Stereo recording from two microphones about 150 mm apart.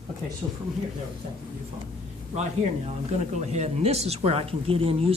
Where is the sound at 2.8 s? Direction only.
45° right (ahead or behind).